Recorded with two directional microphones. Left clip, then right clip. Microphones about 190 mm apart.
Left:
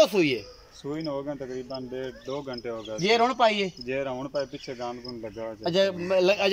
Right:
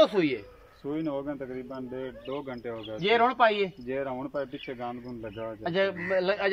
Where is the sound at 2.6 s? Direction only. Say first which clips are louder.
Left 2 dB; 5° left (ahead or behind).